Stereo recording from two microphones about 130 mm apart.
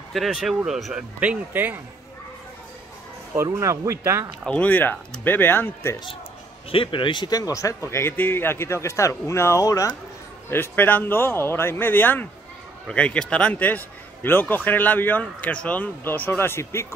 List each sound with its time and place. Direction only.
0.1 s speech: centre (ahead or behind)
1.2 s speech: 10° right (ahead or behind)
3.3 s speech: 25° right (ahead or behind)
4.5 s speech: 10° left (ahead or behind)
6.7 s a man's voice: 40° left (ahead or behind); by 16.8 s 20° left (ahead or behind)